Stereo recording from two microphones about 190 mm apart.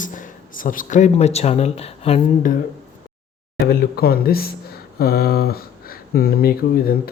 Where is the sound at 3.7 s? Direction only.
55° left (ahead or behind).